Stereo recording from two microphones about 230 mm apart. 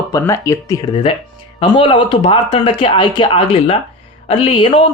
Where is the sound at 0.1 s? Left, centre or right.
Centre.